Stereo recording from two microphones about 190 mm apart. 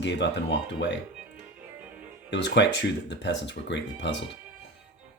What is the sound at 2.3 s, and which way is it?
Speech, 65° left (ahead or behind).